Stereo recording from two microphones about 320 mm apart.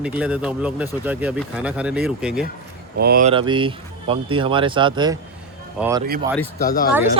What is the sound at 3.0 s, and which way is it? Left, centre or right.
Speech, right.